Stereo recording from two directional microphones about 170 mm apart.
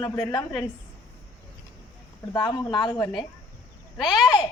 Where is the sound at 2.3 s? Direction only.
25° left (ahead or behind).